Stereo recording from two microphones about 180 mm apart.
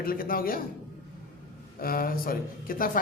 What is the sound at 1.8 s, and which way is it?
A man's voice, 55° left (ahead or behind).